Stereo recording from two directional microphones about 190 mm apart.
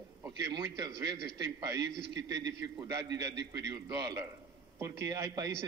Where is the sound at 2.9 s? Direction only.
20° right (ahead or behind).